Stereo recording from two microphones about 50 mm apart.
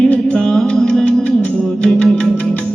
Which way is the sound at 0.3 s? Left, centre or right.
Centre.